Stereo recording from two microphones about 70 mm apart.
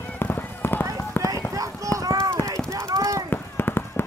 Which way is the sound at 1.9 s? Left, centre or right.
Right.